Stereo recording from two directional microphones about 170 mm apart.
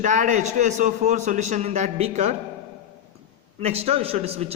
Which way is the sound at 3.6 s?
35° right (ahead or behind).